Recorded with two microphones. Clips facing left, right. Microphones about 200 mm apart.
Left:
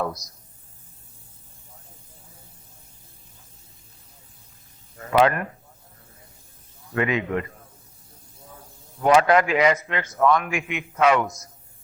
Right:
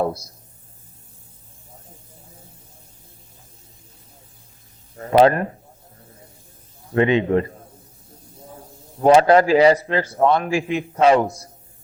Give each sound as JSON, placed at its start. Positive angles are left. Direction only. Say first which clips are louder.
{"t": 0.0, "sound": "a man's voice", "louder": "right 5 dB", "side_deg": -30}
{"t": 4.9, "sound": "a man's voice", "louder": "right 5 dB", "side_deg": -35}
{"t": 6.9, "sound": "a man's voice", "louder": "right 7 dB", "side_deg": -30}